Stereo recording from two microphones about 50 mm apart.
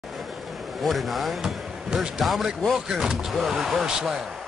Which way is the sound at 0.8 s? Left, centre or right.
Centre.